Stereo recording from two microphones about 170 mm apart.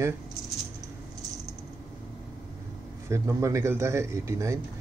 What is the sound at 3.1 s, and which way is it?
Speech, 15° right (ahead or behind).